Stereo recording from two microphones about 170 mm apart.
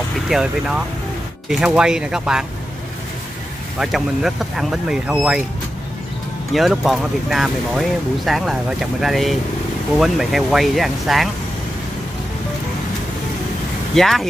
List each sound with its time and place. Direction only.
0.3 s speech: 5° right (ahead or behind)
3.8 s speech: centre (ahead or behind)
6.5 s speech: centre (ahead or behind)
13.9 s speech: centre (ahead or behind)